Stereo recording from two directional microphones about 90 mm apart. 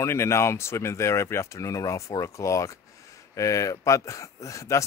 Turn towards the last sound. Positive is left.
turn(degrees=35)  # may be behind; listen again after turning